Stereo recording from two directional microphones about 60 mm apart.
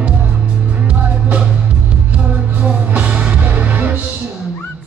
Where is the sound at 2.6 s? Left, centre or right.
Centre.